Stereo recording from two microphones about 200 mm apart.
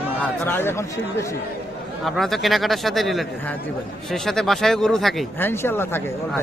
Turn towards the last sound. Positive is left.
turn(degrees=10)  # may be behind; listen again after turning